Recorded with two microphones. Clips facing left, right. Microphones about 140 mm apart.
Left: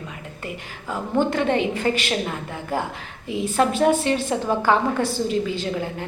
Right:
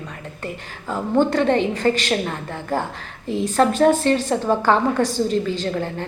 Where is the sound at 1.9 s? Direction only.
10° left (ahead or behind).